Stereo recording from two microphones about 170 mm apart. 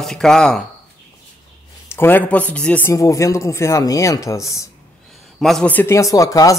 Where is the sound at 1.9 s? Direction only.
15° left (ahead or behind).